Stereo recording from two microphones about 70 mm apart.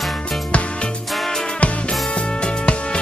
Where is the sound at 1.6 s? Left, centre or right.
Centre.